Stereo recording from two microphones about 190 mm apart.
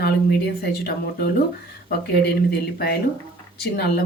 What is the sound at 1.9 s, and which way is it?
Speech, 55° left (ahead or behind).